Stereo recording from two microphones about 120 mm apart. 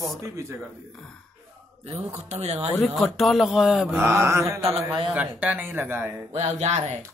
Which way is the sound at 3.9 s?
20° right (ahead or behind).